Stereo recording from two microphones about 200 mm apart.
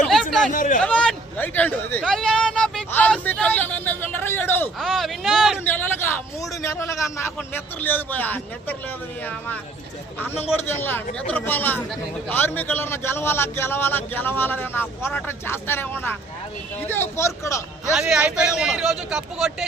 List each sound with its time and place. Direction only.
0.1 s a sound: centre (ahead or behind)
0.5 s a man's voice: 40° left (ahead or behind)
0.8 s a man's voice: 5° left (ahead or behind)
10.7 s a man's voice: 10° left (ahead or behind)
17.9 s a man's voice: 5° right (ahead or behind)